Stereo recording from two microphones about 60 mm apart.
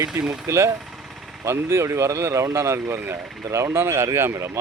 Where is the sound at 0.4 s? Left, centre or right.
Right.